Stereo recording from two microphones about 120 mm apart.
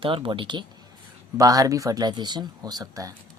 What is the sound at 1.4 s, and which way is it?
Speech, 30° right (ahead or behind).